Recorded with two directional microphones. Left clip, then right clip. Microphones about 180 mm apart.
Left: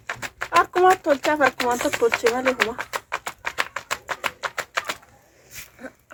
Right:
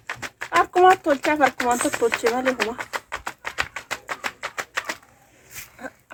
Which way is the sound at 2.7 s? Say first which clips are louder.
Left 1 dB; 10° left (ahead or behind).